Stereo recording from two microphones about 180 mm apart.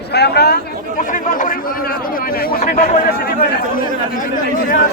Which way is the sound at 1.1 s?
45° left (ahead or behind).